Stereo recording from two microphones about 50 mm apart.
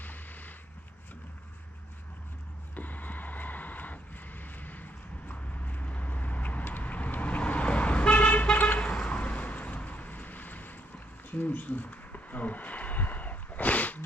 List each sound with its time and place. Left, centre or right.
0.0 s vehicle: left
2.7 s vehicle: left
11.3 s a sound: left